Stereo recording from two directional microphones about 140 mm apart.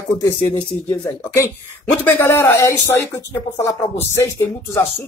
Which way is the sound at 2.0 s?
15° left (ahead or behind).